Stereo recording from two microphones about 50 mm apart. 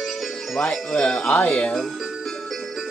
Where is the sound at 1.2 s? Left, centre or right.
Left.